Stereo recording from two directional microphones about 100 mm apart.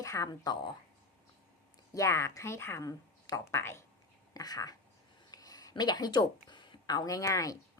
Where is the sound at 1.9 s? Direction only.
30° left (ahead or behind).